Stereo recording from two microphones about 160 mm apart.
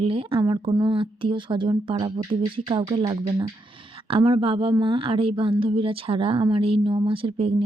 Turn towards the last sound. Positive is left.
turn(degrees=-35)  # may be behind; listen again after turning